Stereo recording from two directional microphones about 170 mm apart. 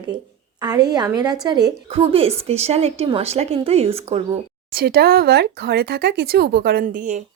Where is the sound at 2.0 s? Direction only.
35° right (ahead or behind).